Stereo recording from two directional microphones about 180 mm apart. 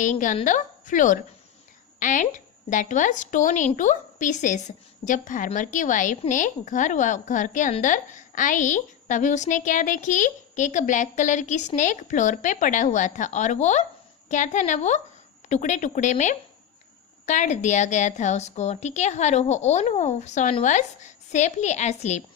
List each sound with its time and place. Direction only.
0.0 s a woman's voice: 45° left (ahead or behind)